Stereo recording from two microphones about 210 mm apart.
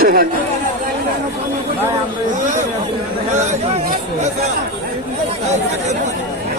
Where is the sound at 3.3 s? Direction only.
35° right (ahead or behind).